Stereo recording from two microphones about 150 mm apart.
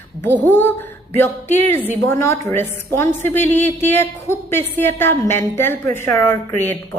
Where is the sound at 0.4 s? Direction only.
15° left (ahead or behind).